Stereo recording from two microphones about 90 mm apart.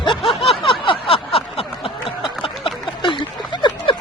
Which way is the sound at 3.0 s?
60° left (ahead or behind).